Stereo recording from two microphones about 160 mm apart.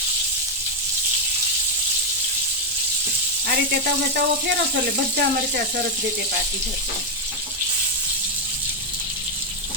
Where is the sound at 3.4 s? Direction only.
90° right.